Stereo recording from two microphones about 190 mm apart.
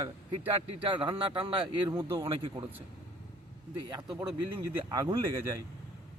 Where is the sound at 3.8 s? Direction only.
20° right (ahead or behind).